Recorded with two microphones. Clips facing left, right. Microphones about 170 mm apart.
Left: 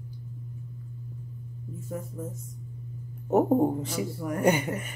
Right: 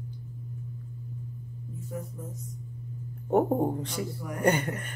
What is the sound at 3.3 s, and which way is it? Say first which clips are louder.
Speech: left 2 dB; 5° left (ahead or behind).